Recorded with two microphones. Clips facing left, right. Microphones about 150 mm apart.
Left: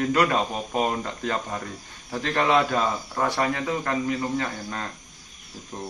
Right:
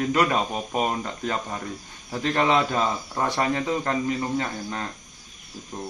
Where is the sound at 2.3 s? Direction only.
15° right (ahead or behind).